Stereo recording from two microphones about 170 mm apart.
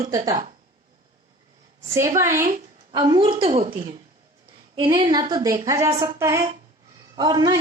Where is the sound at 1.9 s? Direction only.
20° right (ahead or behind); by 3.7 s 35° right (ahead or behind).